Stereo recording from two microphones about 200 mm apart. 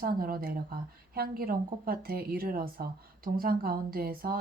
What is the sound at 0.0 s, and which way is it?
Speech, 45° right (ahead or behind).